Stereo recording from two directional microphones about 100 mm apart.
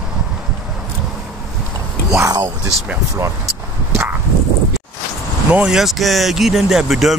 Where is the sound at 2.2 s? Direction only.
30° right (ahead or behind).